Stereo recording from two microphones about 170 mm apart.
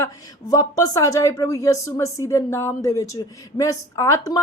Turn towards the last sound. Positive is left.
turn(degrees=15)  # may be behind; listen again after turning